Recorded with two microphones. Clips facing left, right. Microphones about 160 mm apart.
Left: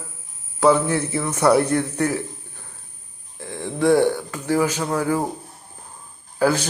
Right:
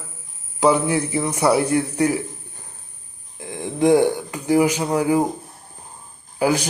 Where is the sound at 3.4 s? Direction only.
15° right (ahead or behind).